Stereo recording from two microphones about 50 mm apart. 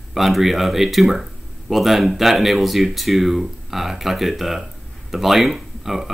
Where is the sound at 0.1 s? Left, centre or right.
Centre.